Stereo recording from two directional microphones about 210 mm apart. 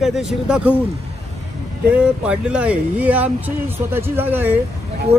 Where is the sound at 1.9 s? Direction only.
5° right (ahead or behind).